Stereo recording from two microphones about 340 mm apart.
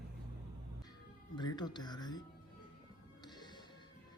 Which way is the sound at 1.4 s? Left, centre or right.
Centre.